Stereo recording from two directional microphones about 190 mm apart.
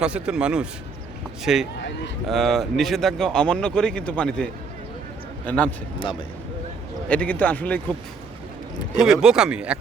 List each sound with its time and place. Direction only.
0.0 s speech: 5° right (ahead or behind)
5.5 s speech: 5° left (ahead or behind)
6.0 s speech: 25° left (ahead or behind)
7.1 s speech: 5° left (ahead or behind)
9.0 s speech: 5° right (ahead or behind)